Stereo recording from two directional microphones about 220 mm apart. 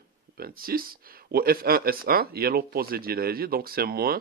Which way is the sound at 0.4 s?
45° right (ahead or behind).